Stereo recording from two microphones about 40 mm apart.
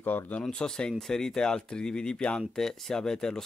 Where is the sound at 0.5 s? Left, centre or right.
Centre.